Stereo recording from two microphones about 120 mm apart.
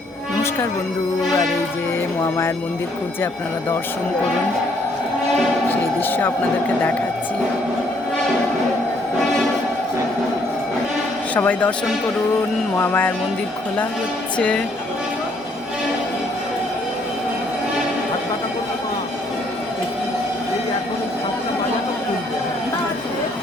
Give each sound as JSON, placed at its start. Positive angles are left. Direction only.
{"t": 6.0, "sound": "a man's voice", "side_deg": 15}
{"t": 11.3, "sound": "music", "side_deg": 15}
{"t": 12.7, "sound": "music", "side_deg": 15}
{"t": 14.3, "sound": "music", "side_deg": 10}